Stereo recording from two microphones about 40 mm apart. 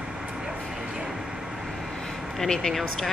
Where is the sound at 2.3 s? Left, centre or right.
Centre.